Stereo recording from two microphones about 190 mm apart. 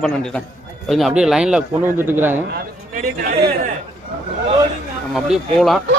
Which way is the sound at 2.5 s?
45° right (ahead or behind).